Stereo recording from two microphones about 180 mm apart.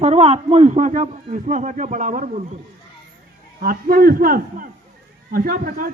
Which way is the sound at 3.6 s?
55° right (ahead or behind).